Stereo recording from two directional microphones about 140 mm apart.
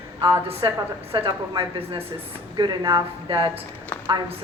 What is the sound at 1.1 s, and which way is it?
A woman's voice, 35° right (ahead or behind).